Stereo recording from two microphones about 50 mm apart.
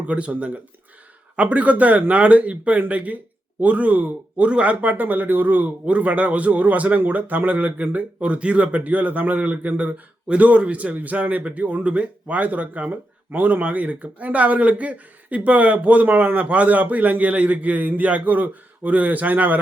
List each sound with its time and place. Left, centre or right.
0.1 s speech: right